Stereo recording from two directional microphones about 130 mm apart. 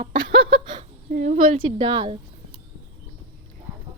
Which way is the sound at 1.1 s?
75° right (ahead or behind).